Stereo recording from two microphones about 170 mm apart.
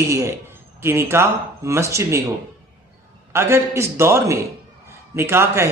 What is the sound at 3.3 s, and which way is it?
Speech, 15° right (ahead or behind).